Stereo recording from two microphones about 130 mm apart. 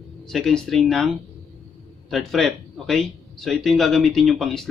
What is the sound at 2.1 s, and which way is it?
Speech, centre (ahead or behind).